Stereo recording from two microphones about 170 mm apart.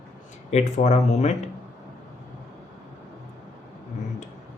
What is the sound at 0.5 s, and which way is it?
Speech, 40° left (ahead or behind).